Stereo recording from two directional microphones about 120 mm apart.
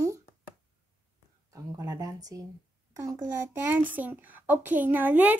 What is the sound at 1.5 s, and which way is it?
A child's voice, 25° right (ahead or behind).